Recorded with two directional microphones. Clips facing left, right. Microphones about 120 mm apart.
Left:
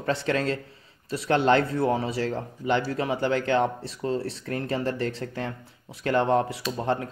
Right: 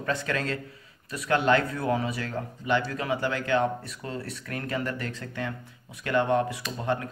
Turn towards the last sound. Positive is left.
turn(degrees=35)  # may be behind; listen again after turning